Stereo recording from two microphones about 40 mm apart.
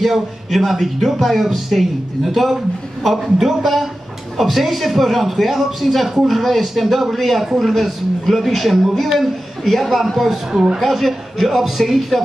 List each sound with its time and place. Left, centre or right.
0.0 s a man's voice: centre
10.5 s speech: centre
10.8 s a man's voice: centre